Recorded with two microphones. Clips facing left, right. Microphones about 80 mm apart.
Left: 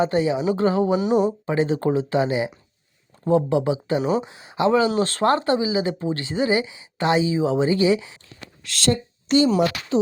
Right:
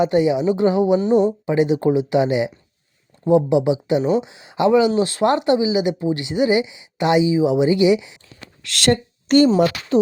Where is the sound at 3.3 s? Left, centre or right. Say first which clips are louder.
Right 4 dB; centre.